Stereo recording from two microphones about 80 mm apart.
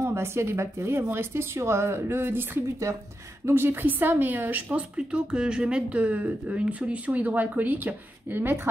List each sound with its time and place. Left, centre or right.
0.0 s a woman's voice: right